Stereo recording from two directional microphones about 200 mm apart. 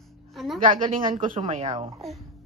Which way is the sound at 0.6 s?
25° right (ahead or behind).